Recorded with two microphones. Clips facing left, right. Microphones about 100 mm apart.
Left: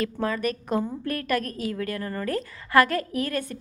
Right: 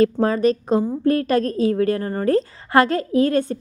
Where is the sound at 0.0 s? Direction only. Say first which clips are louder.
Right 10 dB; 35° right (ahead or behind).